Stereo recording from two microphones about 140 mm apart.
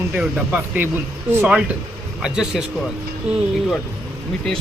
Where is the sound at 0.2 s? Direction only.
10° right (ahead or behind).